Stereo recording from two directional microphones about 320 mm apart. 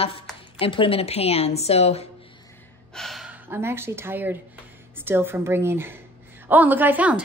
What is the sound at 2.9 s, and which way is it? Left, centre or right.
A woman's voice, centre.